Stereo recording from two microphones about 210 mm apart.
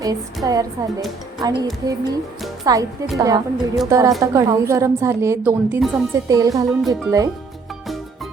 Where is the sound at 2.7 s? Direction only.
15° right (ahead or behind).